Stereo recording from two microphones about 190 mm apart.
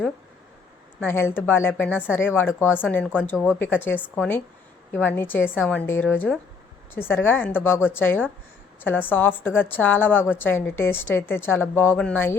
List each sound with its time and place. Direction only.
0.9 s a woman's voice: 10° left (ahead or behind)